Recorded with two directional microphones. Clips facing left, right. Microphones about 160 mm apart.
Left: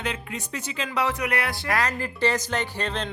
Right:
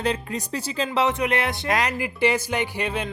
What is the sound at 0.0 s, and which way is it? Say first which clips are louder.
Speech: right 6 dB; 35° right (ahead or behind).